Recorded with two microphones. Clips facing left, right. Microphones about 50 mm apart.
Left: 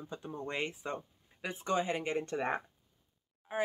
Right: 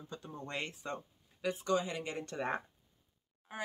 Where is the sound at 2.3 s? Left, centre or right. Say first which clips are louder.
Left 3 dB; centre.